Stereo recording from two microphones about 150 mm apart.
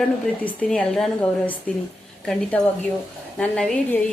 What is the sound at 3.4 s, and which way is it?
Speech, 5° left (ahead or behind).